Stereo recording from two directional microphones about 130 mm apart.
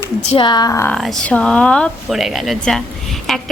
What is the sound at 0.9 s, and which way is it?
Speech, 5° left (ahead or behind).